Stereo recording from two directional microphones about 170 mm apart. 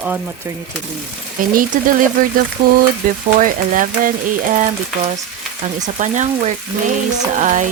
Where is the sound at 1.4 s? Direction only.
55° right (ahead or behind).